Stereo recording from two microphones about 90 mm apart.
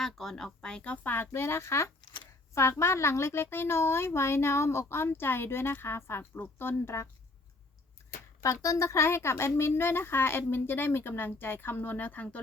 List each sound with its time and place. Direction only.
0.0 s a woman's voice: 5° left (ahead or behind); by 7.1 s 30° left (ahead or behind)
8.4 s a woman's voice: 35° left (ahead or behind); by 12.4 s 15° left (ahead or behind)